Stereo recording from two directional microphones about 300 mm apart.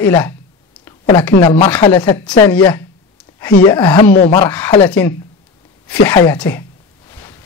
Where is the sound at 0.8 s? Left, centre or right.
Centre.